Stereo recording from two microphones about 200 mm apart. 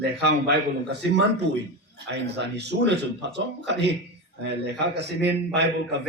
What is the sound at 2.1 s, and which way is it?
A man's voice, 60° right (ahead or behind).